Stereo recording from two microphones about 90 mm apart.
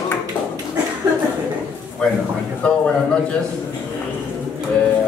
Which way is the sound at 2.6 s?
10° left (ahead or behind).